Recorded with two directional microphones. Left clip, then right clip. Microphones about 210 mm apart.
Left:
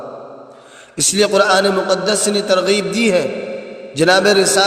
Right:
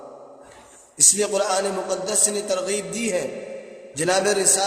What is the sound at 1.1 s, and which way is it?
A man's voice, 35° left (ahead or behind).